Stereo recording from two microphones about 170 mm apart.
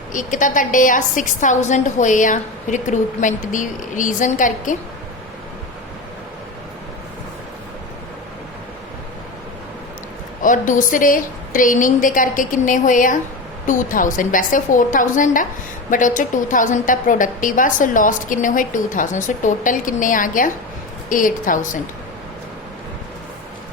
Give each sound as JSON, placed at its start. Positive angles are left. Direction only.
{"t": 0.1, "sound": "a woman's voice", "side_deg": 50}
{"t": 10.4, "sound": "a woman's voice", "side_deg": 50}